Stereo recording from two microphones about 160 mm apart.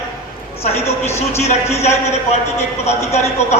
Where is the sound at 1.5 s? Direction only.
45° left (ahead or behind).